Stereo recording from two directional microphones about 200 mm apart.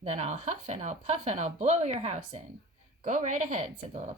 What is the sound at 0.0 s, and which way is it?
Speech, 35° right (ahead or behind).